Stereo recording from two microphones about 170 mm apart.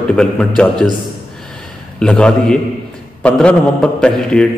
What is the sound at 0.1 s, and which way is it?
Speech, 5° left (ahead or behind).